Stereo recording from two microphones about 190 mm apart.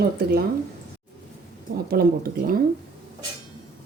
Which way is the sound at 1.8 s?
50° right (ahead or behind).